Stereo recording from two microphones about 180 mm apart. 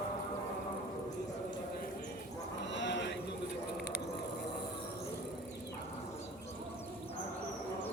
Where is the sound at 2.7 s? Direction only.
80° left.